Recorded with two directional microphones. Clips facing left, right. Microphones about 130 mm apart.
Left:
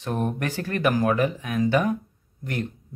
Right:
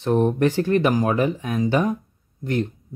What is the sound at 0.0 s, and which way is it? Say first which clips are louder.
Speech: right 8 dB; 30° right (ahead or behind).